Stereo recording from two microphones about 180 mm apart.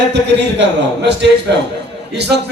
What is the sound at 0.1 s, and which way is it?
A man's voice, 70° right (ahead or behind).